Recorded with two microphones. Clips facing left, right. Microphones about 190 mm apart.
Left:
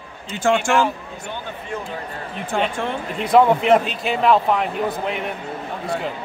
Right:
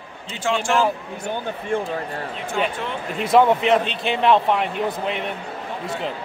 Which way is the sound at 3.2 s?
Centre (ahead or behind).